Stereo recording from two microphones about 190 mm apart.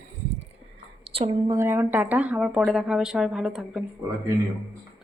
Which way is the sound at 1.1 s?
30° right (ahead or behind).